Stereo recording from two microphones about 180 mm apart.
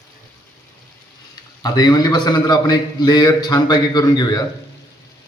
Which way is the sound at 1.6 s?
20° left (ahead or behind).